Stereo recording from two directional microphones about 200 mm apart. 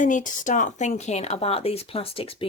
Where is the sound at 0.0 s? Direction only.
40° left (ahead or behind).